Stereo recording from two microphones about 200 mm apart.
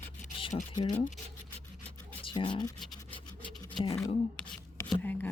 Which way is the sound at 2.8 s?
Centre (ahead or behind).